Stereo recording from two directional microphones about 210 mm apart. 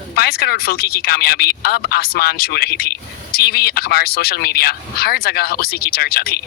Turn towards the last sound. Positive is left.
turn(degrees=45)  # may be behind; listen again after turning